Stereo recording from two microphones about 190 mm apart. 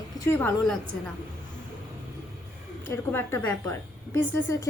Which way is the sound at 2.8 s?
10° left (ahead or behind).